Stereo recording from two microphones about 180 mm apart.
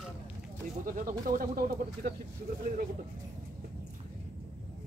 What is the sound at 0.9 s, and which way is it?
Speech, 50° right (ahead or behind).